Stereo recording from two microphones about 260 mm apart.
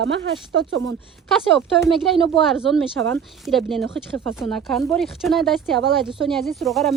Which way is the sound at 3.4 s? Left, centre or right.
Centre.